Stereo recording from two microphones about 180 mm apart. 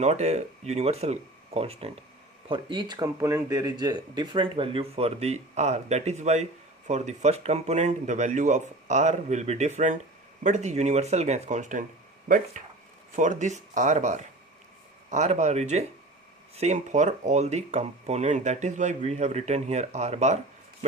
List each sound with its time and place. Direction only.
0.0 s speech: 40° right (ahead or behind)